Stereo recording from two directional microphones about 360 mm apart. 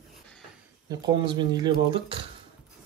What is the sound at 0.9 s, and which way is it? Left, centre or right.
Speech, centre.